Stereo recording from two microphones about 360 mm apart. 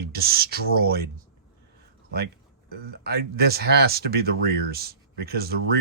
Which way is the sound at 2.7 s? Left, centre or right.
Right.